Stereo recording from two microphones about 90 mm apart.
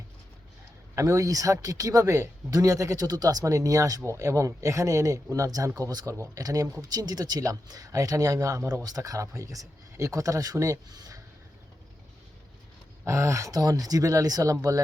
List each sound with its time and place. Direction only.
0.9 s speech: 35° right (ahead or behind)
13.1 s speech: 35° right (ahead or behind)